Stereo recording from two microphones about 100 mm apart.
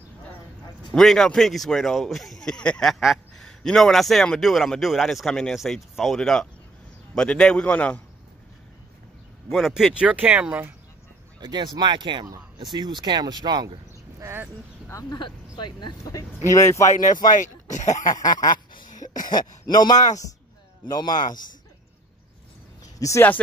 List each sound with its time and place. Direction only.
0.9 s a man's voice: 5° left (ahead or behind)
9.5 s a man's voice: centre (ahead or behind)
10.0 s speech: 15° right (ahead or behind)
11.3 s speech: 45° right (ahead or behind)
14.2 s speech: 20° right (ahead or behind)
14.9 s speech: 35° left (ahead or behind)
15.1 s speech: 50° left (ahead or behind)
16.4 s speech: 30° left (ahead or behind)
18.2 s speech: 40° left (ahead or behind)
19.0 s throat clearing: 40° left (ahead or behind)
19.6 s speech: 45° left (ahead or behind)
22.9 s speech: 30° left (ahead or behind)